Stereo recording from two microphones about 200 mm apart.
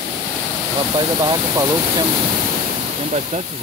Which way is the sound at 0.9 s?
20° right (ahead or behind).